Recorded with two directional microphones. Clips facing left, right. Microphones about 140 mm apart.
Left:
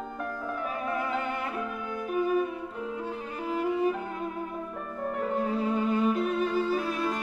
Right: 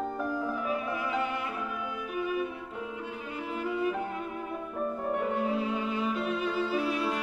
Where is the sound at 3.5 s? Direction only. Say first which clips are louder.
Left 4 dB; 35° left (ahead or behind).